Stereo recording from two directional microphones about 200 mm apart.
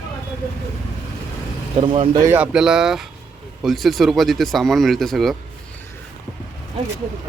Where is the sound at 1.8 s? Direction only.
25° right (ahead or behind).